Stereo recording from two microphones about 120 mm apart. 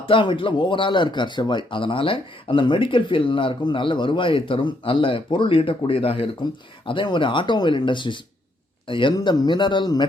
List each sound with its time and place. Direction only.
0.0 s speech: 45° left (ahead or behind)
9.1 s a man's voice: 35° left (ahead or behind)